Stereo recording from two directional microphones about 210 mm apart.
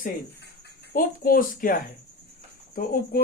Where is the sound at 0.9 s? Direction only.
45° left (ahead or behind).